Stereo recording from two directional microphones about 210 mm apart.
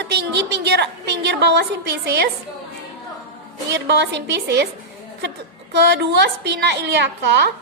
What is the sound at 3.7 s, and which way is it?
Speech, 55° right (ahead or behind).